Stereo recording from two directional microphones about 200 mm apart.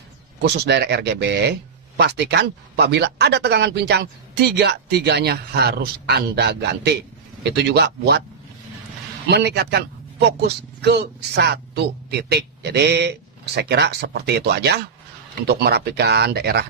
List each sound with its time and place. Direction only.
0.4 s speech: 55° right (ahead or behind)
9.3 s a man's voice: 55° right (ahead or behind)